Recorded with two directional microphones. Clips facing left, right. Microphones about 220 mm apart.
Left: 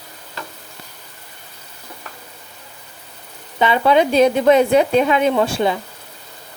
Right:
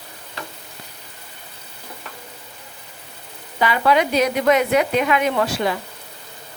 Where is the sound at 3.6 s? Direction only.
25° left (ahead or behind).